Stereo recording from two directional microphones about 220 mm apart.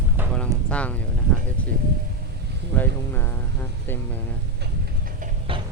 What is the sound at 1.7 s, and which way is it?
Speech, 40° right (ahead or behind).